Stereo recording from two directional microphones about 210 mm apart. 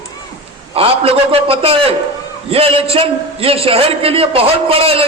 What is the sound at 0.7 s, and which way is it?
A man's voice, 25° right (ahead or behind).